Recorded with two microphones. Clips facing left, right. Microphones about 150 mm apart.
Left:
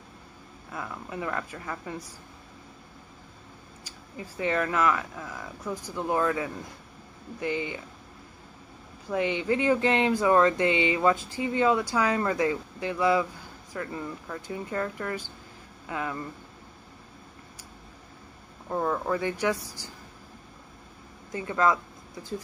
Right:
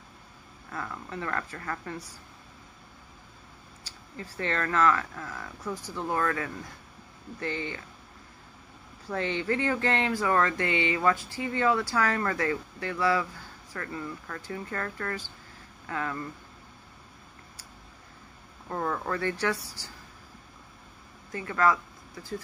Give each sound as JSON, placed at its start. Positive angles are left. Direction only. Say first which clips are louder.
{"t": 0.7, "sound": "speech", "louder": "even", "side_deg": 15}
{"t": 3.8, "sound": "speech", "louder": "left 1 dB", "side_deg": 15}
{"t": 9.1, "sound": "speech", "louder": "left 3 dB", "side_deg": 15}
{"t": 18.7, "sound": "speech", "louder": "left 3 dB", "side_deg": 10}
{"t": 21.3, "sound": "speech", "louder": "left 1 dB", "side_deg": 20}